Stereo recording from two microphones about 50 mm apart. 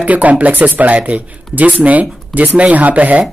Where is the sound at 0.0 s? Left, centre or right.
Right.